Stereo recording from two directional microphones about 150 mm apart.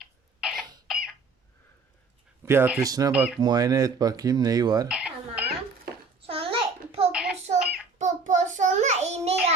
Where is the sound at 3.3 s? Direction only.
25° right (ahead or behind).